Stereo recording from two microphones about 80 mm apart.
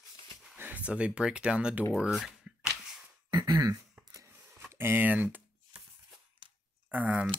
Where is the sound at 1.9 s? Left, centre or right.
Centre.